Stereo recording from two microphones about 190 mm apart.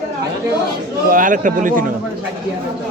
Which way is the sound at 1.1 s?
45° right (ahead or behind).